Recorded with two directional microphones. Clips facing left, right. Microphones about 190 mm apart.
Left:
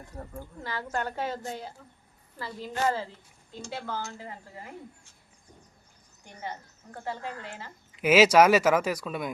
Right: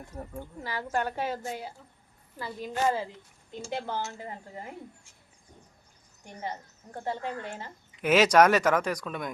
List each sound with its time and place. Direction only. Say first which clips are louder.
0.2 s speech: right 1 dB; 15° right (ahead or behind)
6.9 s speech: right 3 dB; 20° right (ahead or behind)
8.0 s speech: left 2 dB; 5° left (ahead or behind)